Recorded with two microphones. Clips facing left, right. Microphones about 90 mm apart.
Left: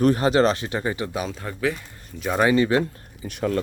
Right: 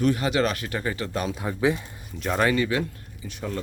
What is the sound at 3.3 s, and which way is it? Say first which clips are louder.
Speech: left 8 dB; 70° left (ahead or behind).